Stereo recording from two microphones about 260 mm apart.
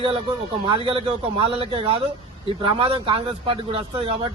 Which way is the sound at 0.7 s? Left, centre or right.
Right.